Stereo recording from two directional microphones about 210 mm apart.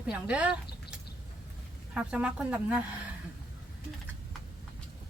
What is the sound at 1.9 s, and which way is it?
Speech, 5° right (ahead or behind).